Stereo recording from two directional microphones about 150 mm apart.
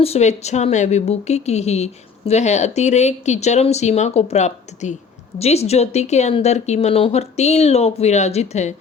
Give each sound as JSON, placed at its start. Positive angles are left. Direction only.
{"t": 0.0, "sound": "a woman's voice", "side_deg": 45}